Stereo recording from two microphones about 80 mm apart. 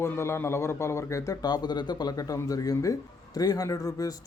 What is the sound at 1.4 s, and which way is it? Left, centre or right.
Speech, left.